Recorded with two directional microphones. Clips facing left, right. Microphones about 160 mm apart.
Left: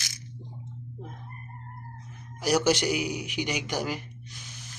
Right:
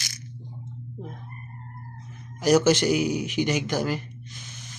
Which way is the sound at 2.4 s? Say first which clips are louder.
Right 5 dB; 10° left (ahead or behind).